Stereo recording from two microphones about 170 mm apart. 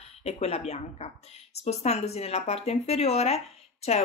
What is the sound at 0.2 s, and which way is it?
A woman's voice, 40° left (ahead or behind).